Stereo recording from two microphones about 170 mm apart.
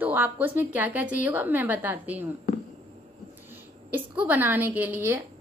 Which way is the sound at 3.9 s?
10° right (ahead or behind).